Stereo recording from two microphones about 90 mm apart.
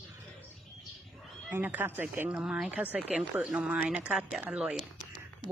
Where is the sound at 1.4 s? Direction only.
20° right (ahead or behind).